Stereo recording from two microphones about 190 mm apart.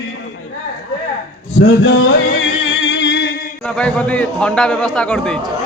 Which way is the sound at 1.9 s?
80° left.